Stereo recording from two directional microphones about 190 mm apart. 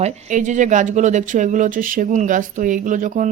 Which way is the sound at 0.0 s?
40° right (ahead or behind).